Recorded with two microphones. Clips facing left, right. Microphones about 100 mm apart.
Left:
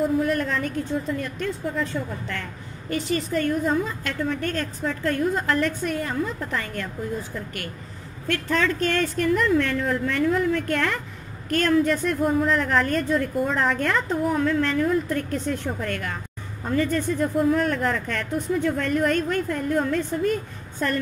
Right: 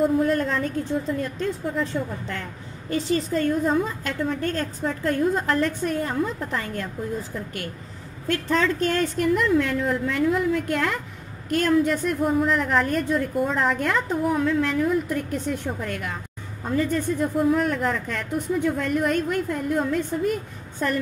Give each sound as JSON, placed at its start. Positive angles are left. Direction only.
{"t": 0.2, "sound": "a woman's voice", "side_deg": -30}
{"t": 3.1, "sound": "a woman's voice", "side_deg": -30}
{"t": 9.5, "sound": "a woman's voice", "side_deg": -5}
{"t": 12.2, "sound": "a woman's voice", "side_deg": -5}